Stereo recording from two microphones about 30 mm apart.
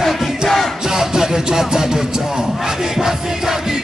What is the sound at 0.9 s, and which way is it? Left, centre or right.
Music, centre.